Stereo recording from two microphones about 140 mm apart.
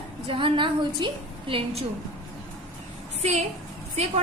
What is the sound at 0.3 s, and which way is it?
A woman's voice, 35° right (ahead or behind).